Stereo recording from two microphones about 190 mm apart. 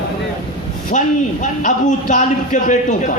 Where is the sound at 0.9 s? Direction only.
40° left (ahead or behind).